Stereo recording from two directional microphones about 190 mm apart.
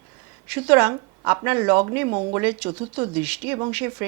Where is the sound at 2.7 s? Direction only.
20° right (ahead or behind).